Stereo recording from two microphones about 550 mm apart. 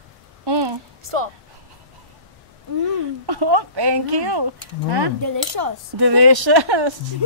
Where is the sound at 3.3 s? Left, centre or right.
Right.